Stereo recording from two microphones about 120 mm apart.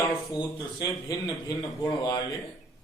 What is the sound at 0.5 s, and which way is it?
A man's voice, 25° left (ahead or behind).